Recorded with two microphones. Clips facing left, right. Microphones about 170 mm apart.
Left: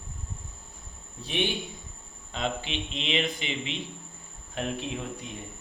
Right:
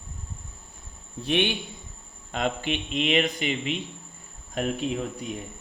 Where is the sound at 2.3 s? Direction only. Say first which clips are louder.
Right 4 dB; 50° right (ahead or behind).